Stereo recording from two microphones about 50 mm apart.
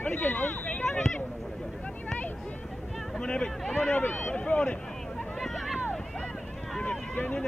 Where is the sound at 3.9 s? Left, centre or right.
Left.